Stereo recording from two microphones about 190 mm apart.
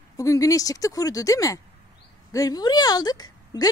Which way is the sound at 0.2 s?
15° left (ahead or behind).